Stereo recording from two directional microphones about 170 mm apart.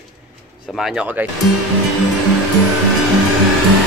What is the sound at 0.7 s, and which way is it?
Speech, centre (ahead or behind).